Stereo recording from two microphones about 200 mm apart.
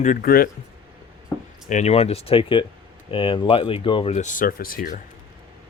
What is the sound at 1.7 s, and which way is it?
Speech, 30° left (ahead or behind).